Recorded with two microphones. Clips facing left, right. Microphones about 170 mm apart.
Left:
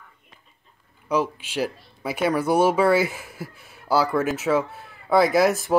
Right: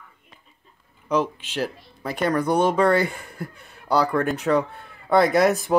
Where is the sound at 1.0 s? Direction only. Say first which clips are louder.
Right 1 dB; 10° left (ahead or behind).